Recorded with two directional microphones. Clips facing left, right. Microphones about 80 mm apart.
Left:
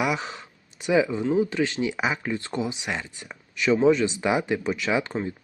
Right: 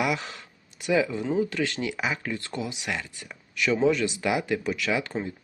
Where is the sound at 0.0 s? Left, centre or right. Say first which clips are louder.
Left 1 dB; centre.